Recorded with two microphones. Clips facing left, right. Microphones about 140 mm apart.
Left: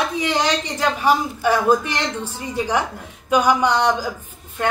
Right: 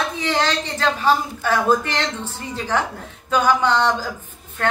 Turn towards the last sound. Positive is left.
turn(degrees=10)  # may be behind; listen again after turning